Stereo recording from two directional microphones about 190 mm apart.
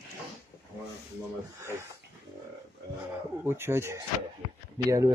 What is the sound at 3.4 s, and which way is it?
Speech, 15° right (ahead or behind).